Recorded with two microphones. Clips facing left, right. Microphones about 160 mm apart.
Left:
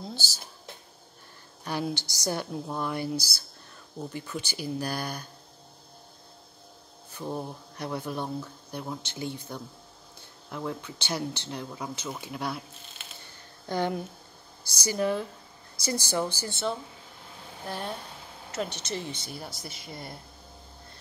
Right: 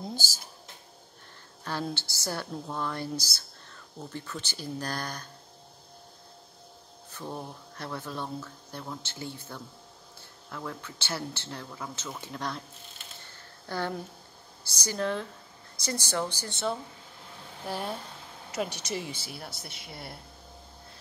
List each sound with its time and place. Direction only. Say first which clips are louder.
1.6 s speech: left 2 dB; 15° left (ahead or behind)
7.2 s speech: left 4 dB; 15° left (ahead or behind)
13.7 s speech: left 4 dB; 20° left (ahead or behind)
17.6 s speech: right 1 dB; 10° right (ahead or behind)